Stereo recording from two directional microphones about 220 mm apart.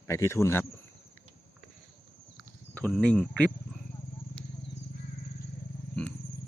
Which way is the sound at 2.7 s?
5° left (ahead or behind).